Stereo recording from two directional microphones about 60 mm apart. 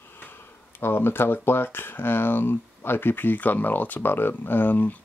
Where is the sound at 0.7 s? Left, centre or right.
Left.